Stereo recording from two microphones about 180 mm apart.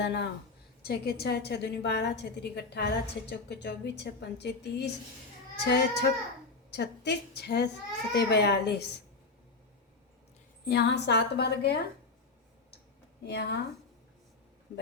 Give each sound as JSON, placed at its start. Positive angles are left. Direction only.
{"t": 0.0, "sound": "a woman's voice", "side_deg": 70}
{"t": 10.7, "sound": "a woman's voice", "side_deg": 70}
{"t": 13.2, "sound": "a woman's voice", "side_deg": 65}